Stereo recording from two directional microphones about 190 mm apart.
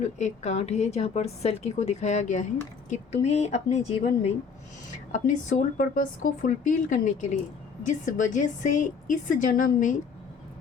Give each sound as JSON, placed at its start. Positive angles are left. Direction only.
{"t": 0.0, "sound": "a woman's voice", "side_deg": 40}